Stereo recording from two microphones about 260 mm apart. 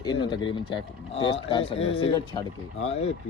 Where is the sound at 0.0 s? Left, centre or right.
Centre.